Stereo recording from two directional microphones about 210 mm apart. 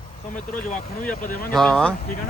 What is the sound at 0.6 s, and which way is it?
Speech, 40° left (ahead or behind).